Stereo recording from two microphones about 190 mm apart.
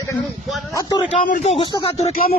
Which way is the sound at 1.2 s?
45° left (ahead or behind).